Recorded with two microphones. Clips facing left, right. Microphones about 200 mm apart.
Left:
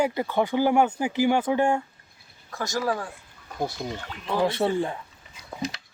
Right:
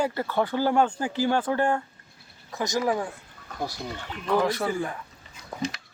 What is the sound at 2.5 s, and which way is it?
Speech, 20° right (ahead or behind).